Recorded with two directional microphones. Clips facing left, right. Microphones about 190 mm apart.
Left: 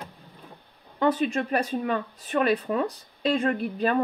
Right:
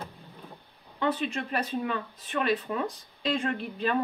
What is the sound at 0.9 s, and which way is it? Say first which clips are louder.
Speech: left 5 dB; 40° left (ahead or behind).